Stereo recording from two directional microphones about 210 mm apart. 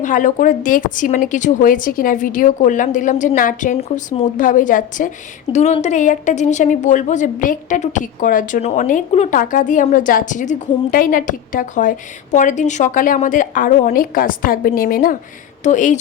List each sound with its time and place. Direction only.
0.0 s a woman's voice: 40° left (ahead or behind)